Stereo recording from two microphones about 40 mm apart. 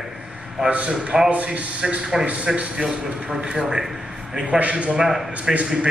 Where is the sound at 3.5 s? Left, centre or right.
Right.